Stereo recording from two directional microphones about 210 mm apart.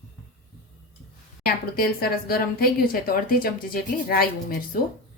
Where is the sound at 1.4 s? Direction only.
45° left (ahead or behind).